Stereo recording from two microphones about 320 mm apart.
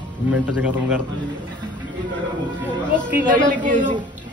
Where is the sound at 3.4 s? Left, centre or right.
Right.